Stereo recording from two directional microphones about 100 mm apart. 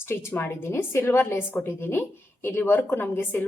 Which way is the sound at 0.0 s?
25° left (ahead or behind).